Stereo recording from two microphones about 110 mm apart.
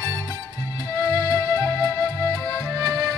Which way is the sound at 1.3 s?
25° left (ahead or behind).